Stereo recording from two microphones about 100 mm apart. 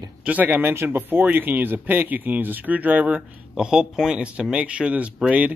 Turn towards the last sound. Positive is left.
turn(degrees=-10)  # may be behind; listen again after turning